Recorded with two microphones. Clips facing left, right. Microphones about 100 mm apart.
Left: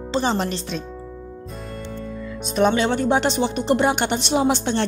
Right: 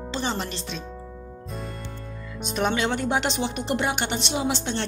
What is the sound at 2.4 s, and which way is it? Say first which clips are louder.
Speech: left 6 dB; 40° left (ahead or behind).